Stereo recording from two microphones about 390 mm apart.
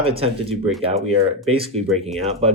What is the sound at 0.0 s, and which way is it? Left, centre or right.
Speech, centre.